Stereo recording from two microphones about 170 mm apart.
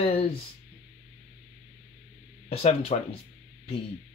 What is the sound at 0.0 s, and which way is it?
Speech, 35° left (ahead or behind).